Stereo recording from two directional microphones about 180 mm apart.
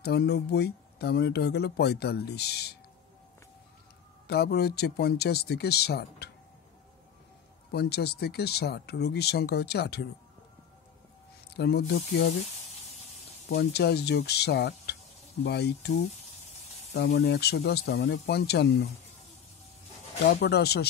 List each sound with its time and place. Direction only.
0.0 s speech: 65° left (ahead or behind)
4.3 s speech: 65° left (ahead or behind)
7.7 s speech: 65° left (ahead or behind)
11.5 s speech: 65° left (ahead or behind)
13.6 s speech: 65° left (ahead or behind)
16.9 s speech: 65° left (ahead or behind)
20.2 s speech: 65° left (ahead or behind)